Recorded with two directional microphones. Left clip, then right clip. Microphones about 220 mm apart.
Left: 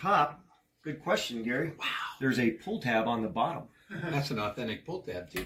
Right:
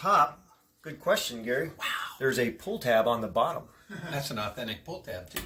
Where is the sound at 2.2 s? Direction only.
45° right (ahead or behind).